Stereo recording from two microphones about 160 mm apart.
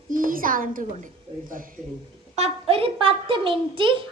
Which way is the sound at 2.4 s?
40° right (ahead or behind).